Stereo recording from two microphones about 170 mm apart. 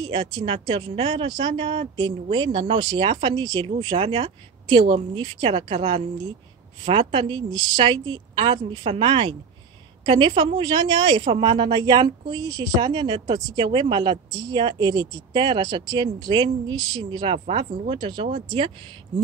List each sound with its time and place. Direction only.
0.0 s a woman's voice: 30° right (ahead or behind)